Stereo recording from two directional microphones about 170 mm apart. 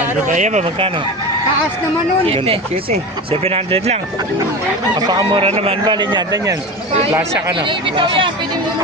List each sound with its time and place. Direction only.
0.3 s speech: 45° right (ahead or behind)
2.2 s speech: 35° right (ahead or behind)
4.9 s a man's voice: 25° right (ahead or behind)
5.5 s a man's voice: 35° right (ahead or behind); by 7.5 s 15° right (ahead or behind)
7.5 s a man's voice: 30° right (ahead or behind)